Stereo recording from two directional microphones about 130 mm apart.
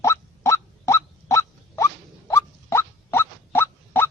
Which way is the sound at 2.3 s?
20° left (ahead or behind).